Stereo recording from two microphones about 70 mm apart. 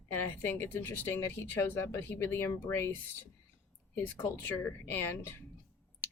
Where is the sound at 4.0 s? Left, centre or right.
Left.